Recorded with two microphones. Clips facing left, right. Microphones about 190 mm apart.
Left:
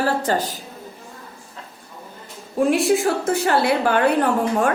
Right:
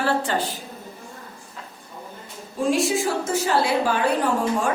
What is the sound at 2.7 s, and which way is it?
A woman's voice, 60° left (ahead or behind).